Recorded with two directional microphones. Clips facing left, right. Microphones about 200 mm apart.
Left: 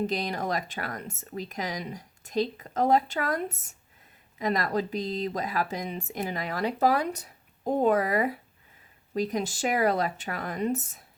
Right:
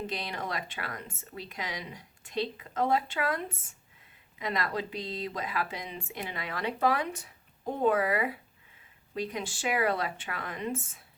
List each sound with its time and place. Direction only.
0.1 s speech: 40° left (ahead or behind)